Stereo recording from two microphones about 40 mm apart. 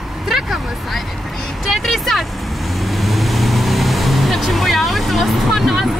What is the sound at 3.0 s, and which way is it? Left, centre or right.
Vehicle, centre.